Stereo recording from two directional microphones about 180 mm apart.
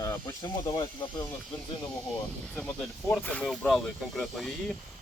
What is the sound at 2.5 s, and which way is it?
Speech, 5° left (ahead or behind).